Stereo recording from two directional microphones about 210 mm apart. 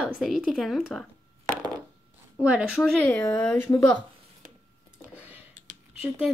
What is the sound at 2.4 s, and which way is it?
Speech, 5° right (ahead or behind).